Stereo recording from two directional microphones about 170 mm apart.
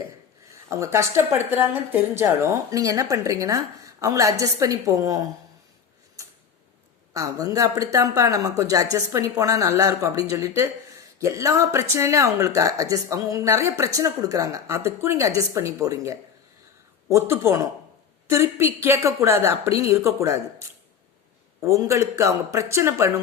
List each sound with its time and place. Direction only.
0.7 s speech: 15° right (ahead or behind)
7.1 s speech: 20° right (ahead or behind)